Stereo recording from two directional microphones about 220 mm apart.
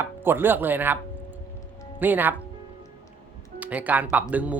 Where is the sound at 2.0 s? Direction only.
10° right (ahead or behind).